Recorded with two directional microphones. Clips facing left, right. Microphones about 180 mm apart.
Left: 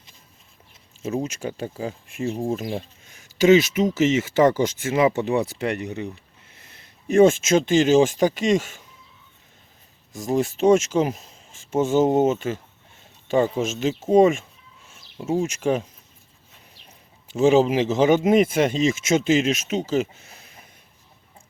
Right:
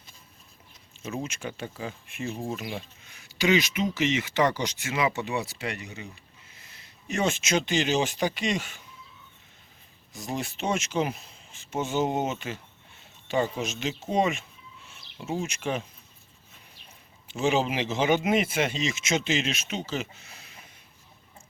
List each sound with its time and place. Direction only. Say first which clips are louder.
1.0 s speech: left 7 dB; 40° left (ahead or behind)
10.1 s speech: left 10 dB; 45° left (ahead or behind)
17.2 s speech: left 9 dB; 40° left (ahead or behind)